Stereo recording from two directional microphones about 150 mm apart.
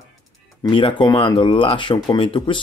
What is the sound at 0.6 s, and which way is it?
Speech, 35° left (ahead or behind).